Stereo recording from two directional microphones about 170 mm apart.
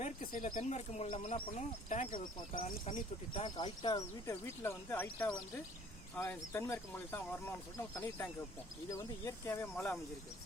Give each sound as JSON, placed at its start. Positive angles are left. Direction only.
{"t": 0.0, "sound": "speech", "side_deg": 55}
{"t": 3.3, "sound": "speech", "side_deg": 25}
{"t": 9.7, "sound": "speech", "side_deg": 5}